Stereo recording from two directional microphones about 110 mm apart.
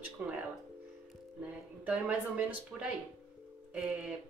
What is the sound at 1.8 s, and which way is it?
A woman's voice, 15° right (ahead or behind).